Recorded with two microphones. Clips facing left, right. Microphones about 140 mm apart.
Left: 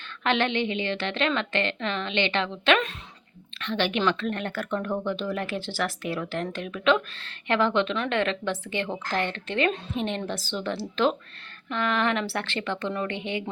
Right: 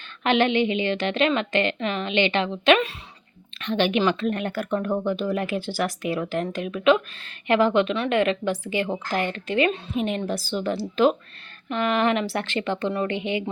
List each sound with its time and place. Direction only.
0.3 s speech: 15° right (ahead or behind)